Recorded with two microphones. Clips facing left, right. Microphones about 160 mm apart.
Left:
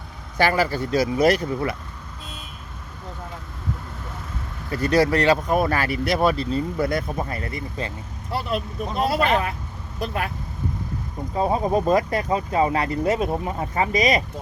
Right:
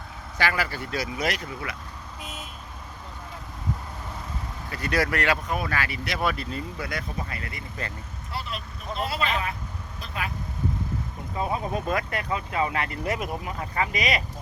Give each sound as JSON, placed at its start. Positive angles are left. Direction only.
{"t": 0.3, "sound": "speech", "side_deg": 35}
{"t": 4.7, "sound": "speech", "side_deg": 35}
{"t": 5.5, "sound": "speech", "side_deg": 45}
{"t": 8.4, "sound": "speech", "side_deg": 50}
{"t": 11.3, "sound": "speech", "side_deg": 35}